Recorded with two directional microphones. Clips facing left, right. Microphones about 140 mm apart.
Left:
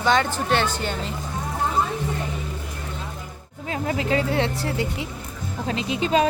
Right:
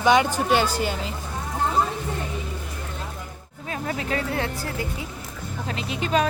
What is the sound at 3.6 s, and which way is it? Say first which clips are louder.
Speech: left 4 dB; 25° left (ahead or behind).